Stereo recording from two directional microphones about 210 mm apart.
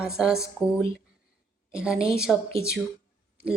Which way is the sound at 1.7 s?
5° right (ahead or behind).